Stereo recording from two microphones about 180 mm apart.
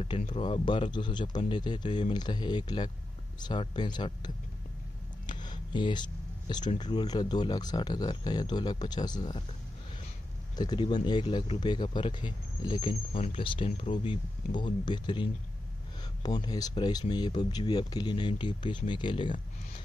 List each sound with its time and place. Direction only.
0.3 s speech: 25° left (ahead or behind)
5.2 s a sound: 25° left (ahead or behind)
6.5 s speech: 25° left (ahead or behind)
10.5 s speech: 25° left (ahead or behind)